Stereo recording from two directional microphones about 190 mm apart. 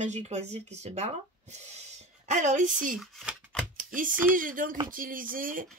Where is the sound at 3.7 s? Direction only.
45° right (ahead or behind).